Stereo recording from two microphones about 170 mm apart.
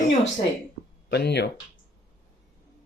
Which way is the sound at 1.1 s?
75° left (ahead or behind).